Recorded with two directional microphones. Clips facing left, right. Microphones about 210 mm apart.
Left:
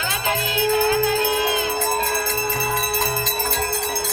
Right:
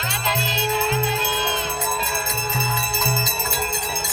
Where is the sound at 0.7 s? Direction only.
70° left (ahead or behind).